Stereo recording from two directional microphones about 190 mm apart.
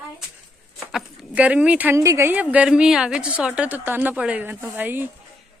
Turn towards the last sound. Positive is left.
turn(degrees=-10)  # may be behind; listen again after turning